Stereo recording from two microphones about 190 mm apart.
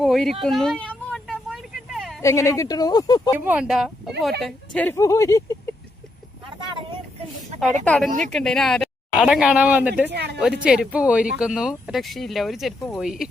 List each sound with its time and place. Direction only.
0.0 s speech: centre (ahead or behind)
0.4 s a sound: centre (ahead or behind)
2.2 s speech: 15° left (ahead or behind)
3.3 s speech: 10° right (ahead or behind); by 5.7 s 15° left (ahead or behind)
7.9 s speech: 5° left (ahead or behind)
10.1 s a woman's voice: 60° right (ahead or behind)
10.4 s speech: 5° right (ahead or behind)